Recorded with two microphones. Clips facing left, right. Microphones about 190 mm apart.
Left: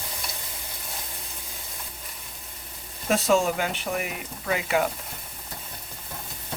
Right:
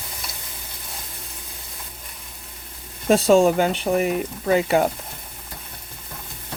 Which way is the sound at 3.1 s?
30° right (ahead or behind).